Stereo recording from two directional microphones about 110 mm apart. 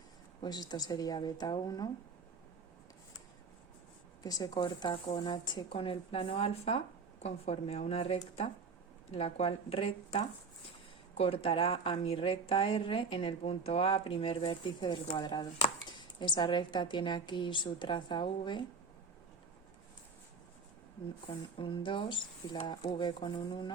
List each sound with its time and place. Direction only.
0.4 s a woman's voice: 40° left (ahead or behind)
4.2 s a woman's voice: 35° left (ahead or behind); by 9.9 s 60° left (ahead or behind)
11.2 s a woman's voice: 65° left (ahead or behind); by 18.6 s 45° left (ahead or behind)
21.6 s a woman's voice: 50° left (ahead or behind)